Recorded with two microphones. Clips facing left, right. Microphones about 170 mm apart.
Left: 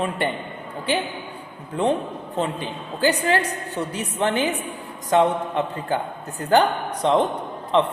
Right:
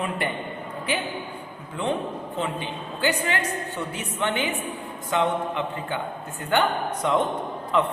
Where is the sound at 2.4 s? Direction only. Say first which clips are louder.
Left 5 dB; 40° left (ahead or behind).